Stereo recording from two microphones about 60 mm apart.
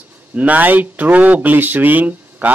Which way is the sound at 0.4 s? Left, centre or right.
Right.